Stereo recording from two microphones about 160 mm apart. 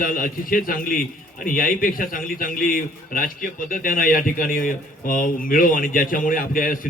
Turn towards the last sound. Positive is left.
turn(degrees=60)  # may be behind; listen again after turning